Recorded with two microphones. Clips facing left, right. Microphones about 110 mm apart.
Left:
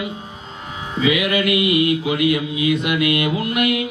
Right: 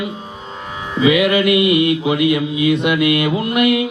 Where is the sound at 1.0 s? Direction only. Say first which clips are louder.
Right 5 dB; 30° right (ahead or behind).